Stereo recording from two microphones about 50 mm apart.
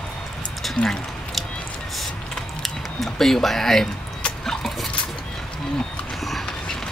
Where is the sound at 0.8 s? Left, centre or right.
Left.